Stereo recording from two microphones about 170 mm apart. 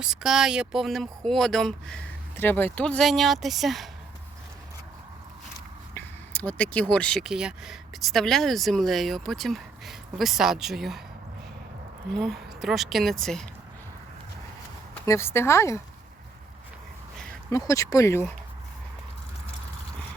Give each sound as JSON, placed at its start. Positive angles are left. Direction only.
{"t": 0.0, "sound": "speech", "side_deg": -5}
{"t": 5.9, "sound": "speech", "side_deg": 10}
{"t": 12.1, "sound": "speech", "side_deg": 0}
{"t": 15.0, "sound": "speech", "side_deg": 15}
{"t": 17.5, "sound": "speech", "side_deg": 20}